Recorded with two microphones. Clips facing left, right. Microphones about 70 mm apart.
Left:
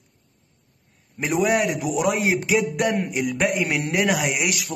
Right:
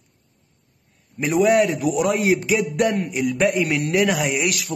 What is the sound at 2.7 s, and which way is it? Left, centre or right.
A man's voice, centre.